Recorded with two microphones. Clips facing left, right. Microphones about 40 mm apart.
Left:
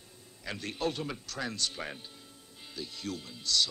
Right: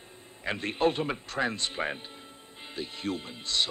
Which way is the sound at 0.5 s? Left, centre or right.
Right.